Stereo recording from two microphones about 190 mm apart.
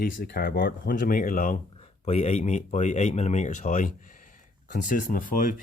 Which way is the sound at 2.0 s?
35° left (ahead or behind).